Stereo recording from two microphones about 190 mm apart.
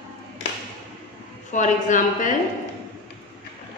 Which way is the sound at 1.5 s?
40° left (ahead or behind).